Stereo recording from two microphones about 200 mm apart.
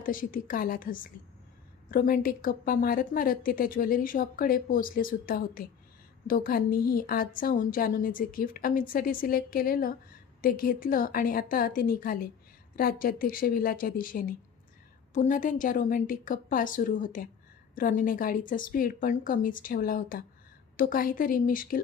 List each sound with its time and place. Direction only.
0.0 s a woman's voice: 45° left (ahead or behind)